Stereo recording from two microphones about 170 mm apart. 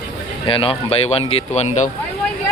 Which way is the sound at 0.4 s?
30° left (ahead or behind).